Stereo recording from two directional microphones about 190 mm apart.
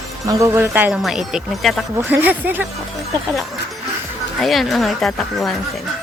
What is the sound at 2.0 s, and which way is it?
Speech, 10° right (ahead or behind).